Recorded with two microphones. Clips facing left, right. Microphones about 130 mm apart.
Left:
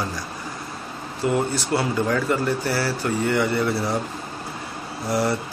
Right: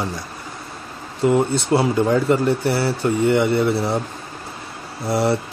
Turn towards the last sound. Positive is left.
turn(degrees=-25)  # may be behind; listen again after turning